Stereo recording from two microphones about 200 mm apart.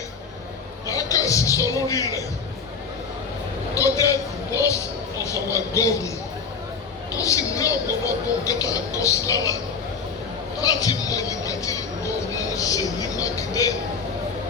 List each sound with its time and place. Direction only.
0.9 s a man's voice: 15° left (ahead or behind)
3.8 s a man's voice: 15° left (ahead or behind)
7.2 s speech: 15° left (ahead or behind)
10.6 s speech: 20° left (ahead or behind)